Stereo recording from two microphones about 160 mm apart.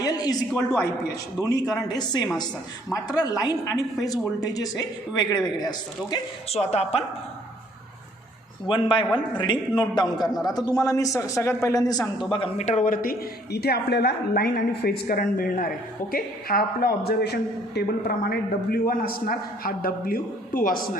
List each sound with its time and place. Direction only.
0.0 s a sound: 25° left (ahead or behind)
1.4 s a man's voice: 25° left (ahead or behind)
6.5 s speech: 40° left (ahead or behind)
8.6 s a man's voice: 30° left (ahead or behind)
12.3 s speech: 35° left (ahead or behind)
12.6 s a man's voice: 55° left (ahead or behind)